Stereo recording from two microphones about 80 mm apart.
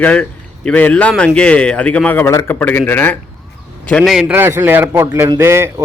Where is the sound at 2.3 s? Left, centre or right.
Left.